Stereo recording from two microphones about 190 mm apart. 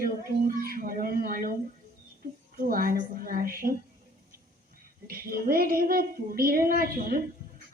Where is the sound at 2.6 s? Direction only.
50° right (ahead or behind).